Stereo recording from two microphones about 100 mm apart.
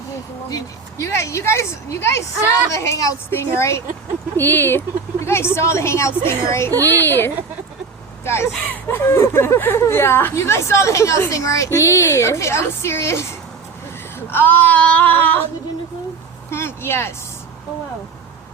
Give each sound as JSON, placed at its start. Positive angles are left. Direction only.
{"t": 0.5, "sound": "a woman's voice", "side_deg": 30}
{"t": 14.3, "sound": "child singing", "side_deg": 20}
{"t": 16.5, "sound": "speech", "side_deg": 25}